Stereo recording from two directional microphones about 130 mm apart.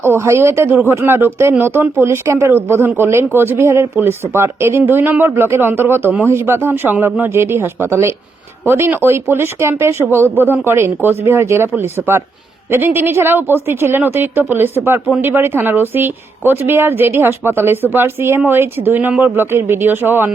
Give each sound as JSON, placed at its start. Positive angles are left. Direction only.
{"t": 0.0, "sound": "speech", "side_deg": -20}